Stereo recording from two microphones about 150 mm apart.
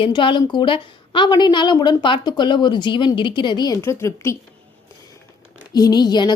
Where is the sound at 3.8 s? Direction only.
20° left (ahead or behind).